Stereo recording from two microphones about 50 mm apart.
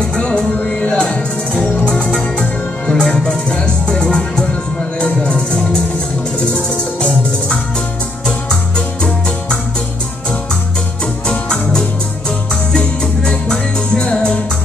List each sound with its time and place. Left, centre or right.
0.0 s music: centre
0.6 s music: left
2.9 s music: centre
7.0 s music: left
11.2 s music: centre